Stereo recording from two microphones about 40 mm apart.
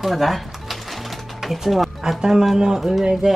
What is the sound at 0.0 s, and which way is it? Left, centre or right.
Music, centre.